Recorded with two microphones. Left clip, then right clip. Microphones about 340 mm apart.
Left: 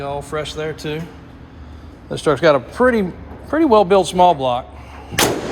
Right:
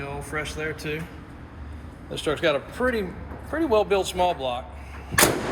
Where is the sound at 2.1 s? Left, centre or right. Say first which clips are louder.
Left 10 dB; centre.